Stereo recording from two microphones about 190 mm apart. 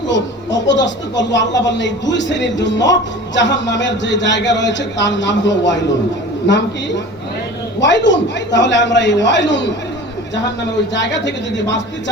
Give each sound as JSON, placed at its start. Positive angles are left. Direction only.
{"t": 0.1, "sound": "speech", "side_deg": 70}
{"t": 7.8, "sound": "speech", "side_deg": 70}
{"t": 10.9, "sound": "speech", "side_deg": 70}